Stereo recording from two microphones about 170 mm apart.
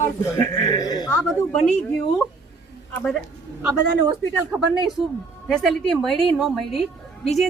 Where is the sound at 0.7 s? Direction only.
25° left (ahead or behind).